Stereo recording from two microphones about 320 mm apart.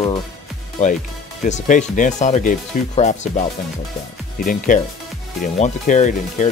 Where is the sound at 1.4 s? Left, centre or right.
Left.